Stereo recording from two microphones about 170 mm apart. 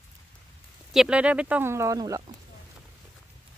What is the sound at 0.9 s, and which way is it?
Speech, 5° right (ahead or behind).